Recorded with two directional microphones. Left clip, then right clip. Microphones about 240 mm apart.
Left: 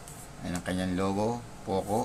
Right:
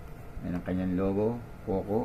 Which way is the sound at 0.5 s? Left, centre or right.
Centre.